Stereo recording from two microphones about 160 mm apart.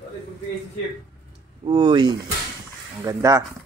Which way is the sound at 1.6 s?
30° right (ahead or behind).